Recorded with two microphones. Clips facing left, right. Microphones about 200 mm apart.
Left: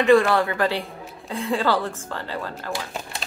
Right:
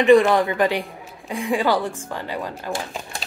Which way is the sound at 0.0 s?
15° right (ahead or behind).